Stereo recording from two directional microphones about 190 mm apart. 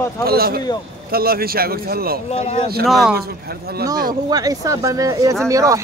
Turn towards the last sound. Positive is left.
turn(degrees=-15)  # may be behind; listen again after turning